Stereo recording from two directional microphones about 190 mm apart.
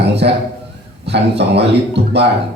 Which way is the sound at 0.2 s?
60° right (ahead or behind).